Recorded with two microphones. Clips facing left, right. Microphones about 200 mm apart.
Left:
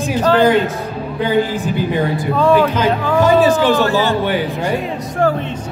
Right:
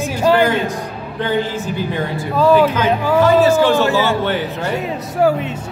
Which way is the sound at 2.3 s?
5° right (ahead or behind).